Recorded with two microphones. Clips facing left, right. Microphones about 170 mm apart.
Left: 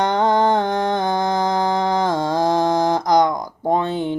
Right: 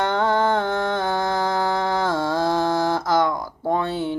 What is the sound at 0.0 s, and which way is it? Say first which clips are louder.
Music: left 3 dB; 15° left (ahead or behind).